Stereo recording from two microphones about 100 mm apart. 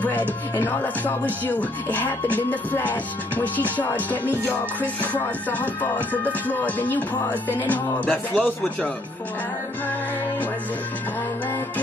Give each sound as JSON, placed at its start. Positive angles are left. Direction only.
{"t": 0.0, "sound": "speech", "side_deg": 15}